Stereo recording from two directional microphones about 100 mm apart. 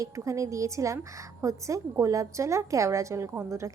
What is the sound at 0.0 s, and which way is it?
A woman's voice, 35° right (ahead or behind).